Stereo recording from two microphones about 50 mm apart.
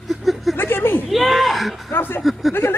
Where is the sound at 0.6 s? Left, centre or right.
Left.